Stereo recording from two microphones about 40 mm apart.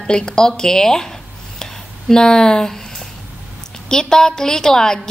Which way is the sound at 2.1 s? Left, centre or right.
Centre.